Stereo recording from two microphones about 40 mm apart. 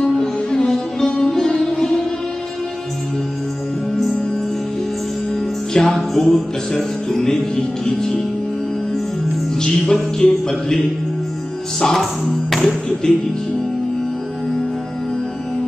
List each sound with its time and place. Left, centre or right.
0.0 s music: centre
5.7 s music: centre
9.6 s music: centre
11.8 s speech: centre